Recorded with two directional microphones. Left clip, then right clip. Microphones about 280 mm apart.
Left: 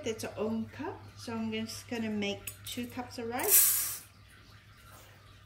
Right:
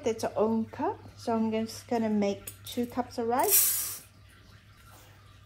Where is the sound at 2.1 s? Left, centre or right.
Centre.